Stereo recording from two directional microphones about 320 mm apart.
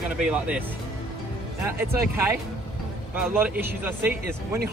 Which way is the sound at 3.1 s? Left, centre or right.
Centre.